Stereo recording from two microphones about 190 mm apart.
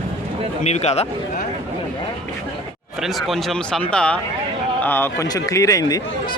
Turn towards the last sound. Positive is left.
turn(degrees=20)  # may be behind; listen again after turning